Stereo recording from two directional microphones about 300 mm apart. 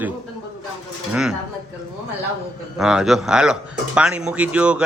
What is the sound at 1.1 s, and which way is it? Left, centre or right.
Speech, centre.